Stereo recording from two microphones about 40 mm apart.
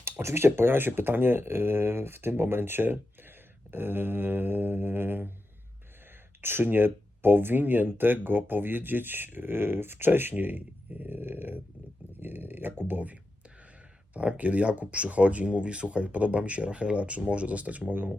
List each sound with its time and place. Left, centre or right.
0.0 s speech: right
6.4 s speech: right
14.1 s speech: right
17.9 s speech: right